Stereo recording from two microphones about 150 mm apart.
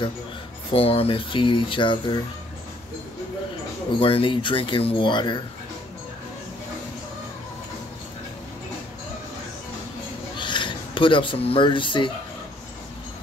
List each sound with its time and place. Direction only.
0.7 s speech: 40° left (ahead or behind)
4.0 s speech: 35° left (ahead or behind)
10.3 s speech: 30° left (ahead or behind)